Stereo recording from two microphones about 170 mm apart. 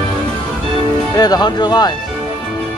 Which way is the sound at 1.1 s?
25° left (ahead or behind).